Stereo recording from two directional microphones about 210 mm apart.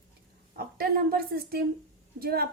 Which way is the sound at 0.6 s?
45° right (ahead or behind).